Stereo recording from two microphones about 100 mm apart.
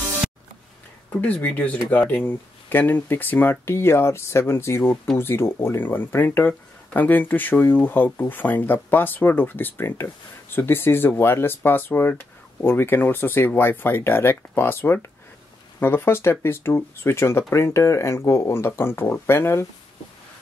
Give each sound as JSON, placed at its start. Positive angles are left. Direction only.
{"t": 1.1, "sound": "speech", "side_deg": 15}